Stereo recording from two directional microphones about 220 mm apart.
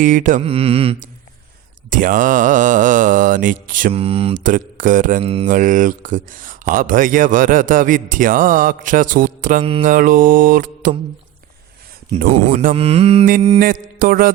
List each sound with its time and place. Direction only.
0.0 s speech: 35° right (ahead or behind)
1.9 s speech: 35° right (ahead or behind)
12.5 s speech: 40° right (ahead or behind)
12.7 s mantra: 30° right (ahead or behind)
13.2 s speech: 35° right (ahead or behind)